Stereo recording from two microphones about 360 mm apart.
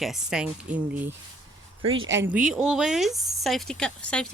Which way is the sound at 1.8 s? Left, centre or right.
Right.